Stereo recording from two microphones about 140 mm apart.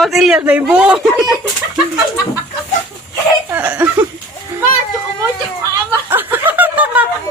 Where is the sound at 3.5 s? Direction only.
10° right (ahead or behind).